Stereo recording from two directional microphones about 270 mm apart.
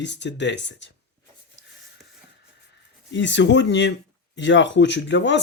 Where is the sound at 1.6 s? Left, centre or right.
Left.